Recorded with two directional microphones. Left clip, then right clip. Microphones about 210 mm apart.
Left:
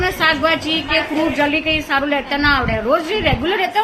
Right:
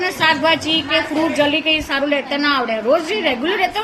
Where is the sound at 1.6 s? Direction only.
15° left (ahead or behind).